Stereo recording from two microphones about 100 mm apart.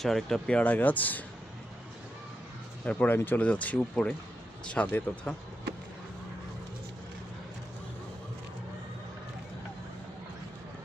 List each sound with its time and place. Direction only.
0.0 s speech: 5° left (ahead or behind)
2.8 s speech: 15° left (ahead or behind)